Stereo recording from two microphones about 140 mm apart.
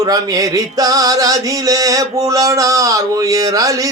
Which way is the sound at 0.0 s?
25° right (ahead or behind).